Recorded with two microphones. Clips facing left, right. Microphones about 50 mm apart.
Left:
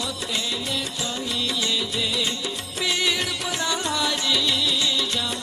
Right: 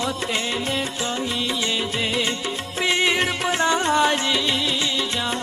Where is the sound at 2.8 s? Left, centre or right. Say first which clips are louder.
Right 4 dB; right.